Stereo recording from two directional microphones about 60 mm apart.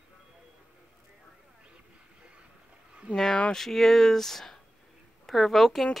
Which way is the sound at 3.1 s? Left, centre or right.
Centre.